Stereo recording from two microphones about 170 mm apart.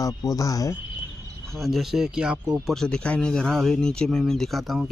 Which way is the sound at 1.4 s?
Centre (ahead or behind).